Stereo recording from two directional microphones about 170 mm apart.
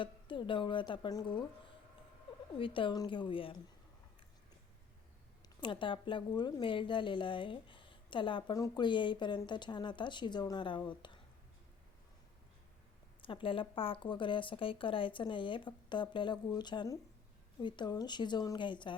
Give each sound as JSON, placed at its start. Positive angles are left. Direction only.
{"t": 0.0, "sound": "a woman's voice", "side_deg": 30}
{"t": 2.5, "sound": "a woman's voice", "side_deg": 30}
{"t": 5.5, "sound": "a woman's voice", "side_deg": 30}
{"t": 13.2, "sound": "a woman's voice", "side_deg": 30}